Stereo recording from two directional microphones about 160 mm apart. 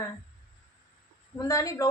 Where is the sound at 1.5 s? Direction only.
20° left (ahead or behind).